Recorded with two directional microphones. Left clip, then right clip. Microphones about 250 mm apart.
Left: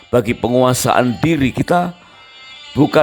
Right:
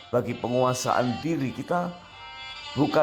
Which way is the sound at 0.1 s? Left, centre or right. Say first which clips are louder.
Left 11 dB; left.